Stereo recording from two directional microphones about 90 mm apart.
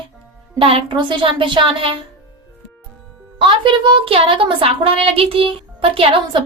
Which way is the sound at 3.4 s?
65° right (ahead or behind).